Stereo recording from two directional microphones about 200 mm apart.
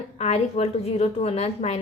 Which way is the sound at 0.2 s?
30° left (ahead or behind).